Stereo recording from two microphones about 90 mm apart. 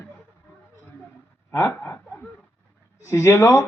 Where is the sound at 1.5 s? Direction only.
30° left (ahead or behind).